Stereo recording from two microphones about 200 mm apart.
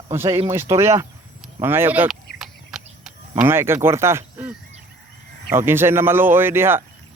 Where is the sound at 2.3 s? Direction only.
Centre (ahead or behind).